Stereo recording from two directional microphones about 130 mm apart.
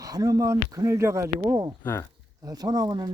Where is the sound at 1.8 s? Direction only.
20° left (ahead or behind).